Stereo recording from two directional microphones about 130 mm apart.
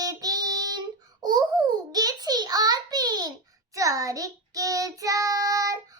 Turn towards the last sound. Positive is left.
turn(degrees=-25)  # may be behind; listen again after turning